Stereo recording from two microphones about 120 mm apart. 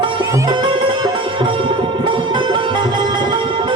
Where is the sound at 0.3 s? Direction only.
30° right (ahead or behind).